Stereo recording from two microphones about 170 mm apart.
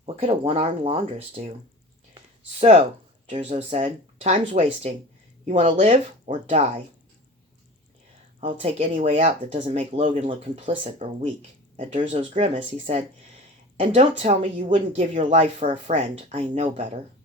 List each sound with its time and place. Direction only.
0.0 s speech: 40° right (ahead or behind)
3.2 s speech: 35° right (ahead or behind)
8.4 s speech: 35° right (ahead or behind)